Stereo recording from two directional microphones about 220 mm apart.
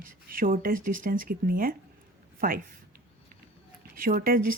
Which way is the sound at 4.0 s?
40° right (ahead or behind).